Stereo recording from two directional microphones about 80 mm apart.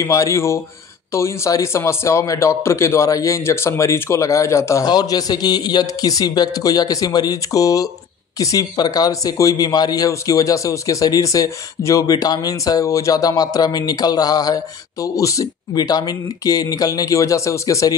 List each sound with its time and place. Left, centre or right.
0.0 s speech: left
4.8 s speech: left
8.7 s speech: left
12.1 s speech: left
15.7 s speech: left